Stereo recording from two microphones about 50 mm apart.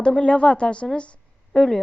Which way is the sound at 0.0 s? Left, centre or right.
Centre.